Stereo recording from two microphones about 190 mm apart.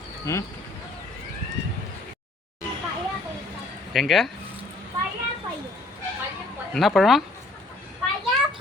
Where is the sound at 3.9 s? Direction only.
Centre (ahead or behind).